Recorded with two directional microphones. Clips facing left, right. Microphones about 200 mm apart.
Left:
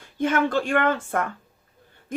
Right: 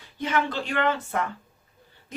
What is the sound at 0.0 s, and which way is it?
Speech, 50° left (ahead or behind).